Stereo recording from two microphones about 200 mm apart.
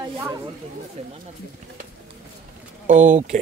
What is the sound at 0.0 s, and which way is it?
Speech, 20° right (ahead or behind).